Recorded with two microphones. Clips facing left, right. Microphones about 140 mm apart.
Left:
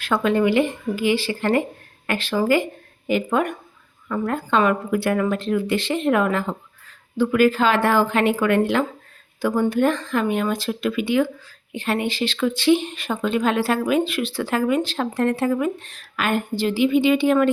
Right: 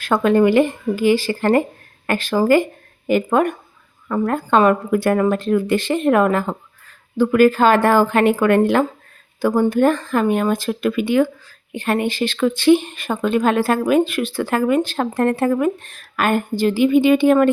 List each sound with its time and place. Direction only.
0.0 s speech: 45° right (ahead or behind)